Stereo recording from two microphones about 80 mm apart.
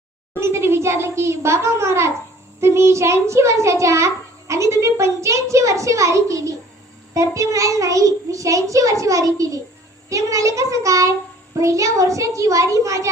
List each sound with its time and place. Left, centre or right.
0.3 s a child's voice: right